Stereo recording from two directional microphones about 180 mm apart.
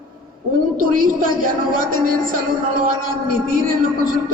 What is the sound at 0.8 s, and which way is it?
A woman's voice, 50° right (ahead or behind).